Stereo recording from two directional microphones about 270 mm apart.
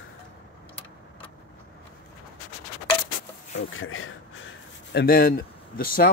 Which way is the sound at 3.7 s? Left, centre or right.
Left.